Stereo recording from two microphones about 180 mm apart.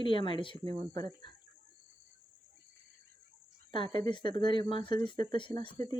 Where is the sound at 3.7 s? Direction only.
25° left (ahead or behind).